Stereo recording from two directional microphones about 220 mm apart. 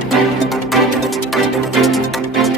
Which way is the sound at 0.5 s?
Centre (ahead or behind).